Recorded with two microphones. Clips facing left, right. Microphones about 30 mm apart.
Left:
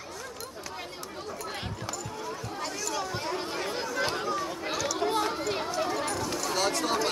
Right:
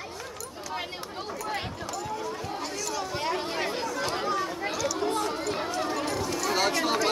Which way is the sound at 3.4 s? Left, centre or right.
Right.